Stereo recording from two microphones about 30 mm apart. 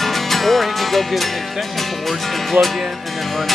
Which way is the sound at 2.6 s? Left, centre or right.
Right.